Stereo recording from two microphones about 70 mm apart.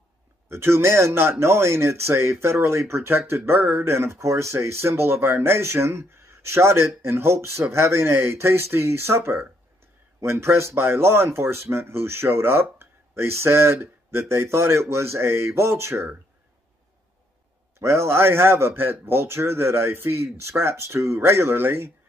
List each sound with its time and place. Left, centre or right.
0.5 s speech: right
17.7 s speech: right